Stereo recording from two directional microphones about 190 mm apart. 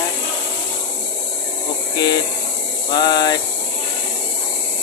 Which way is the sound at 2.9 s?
20° left (ahead or behind).